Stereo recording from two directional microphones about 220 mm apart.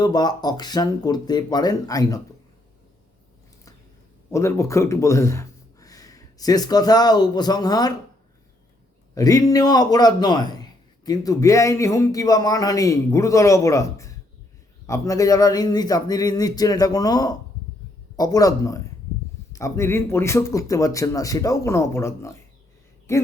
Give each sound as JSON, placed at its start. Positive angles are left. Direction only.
{"t": 0.0, "sound": "a man's voice", "side_deg": 20}
{"t": 4.3, "sound": "speech", "side_deg": 15}
{"t": 9.1, "sound": "a man's voice", "side_deg": 15}